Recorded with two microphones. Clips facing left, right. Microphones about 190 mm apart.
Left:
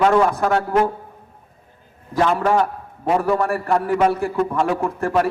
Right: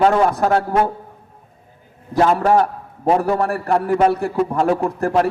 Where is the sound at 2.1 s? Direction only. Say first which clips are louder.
Right 3 dB; 30° right (ahead or behind).